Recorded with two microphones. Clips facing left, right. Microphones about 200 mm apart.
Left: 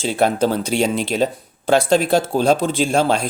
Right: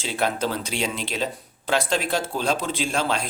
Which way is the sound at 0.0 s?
50° left (ahead or behind).